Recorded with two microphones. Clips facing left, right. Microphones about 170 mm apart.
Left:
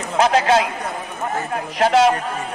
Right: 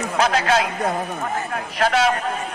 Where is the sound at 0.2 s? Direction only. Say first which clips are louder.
Left 4 dB; 25° left (ahead or behind).